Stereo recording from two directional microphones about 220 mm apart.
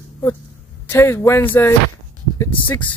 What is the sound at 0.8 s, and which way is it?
Speech, 10° left (ahead or behind).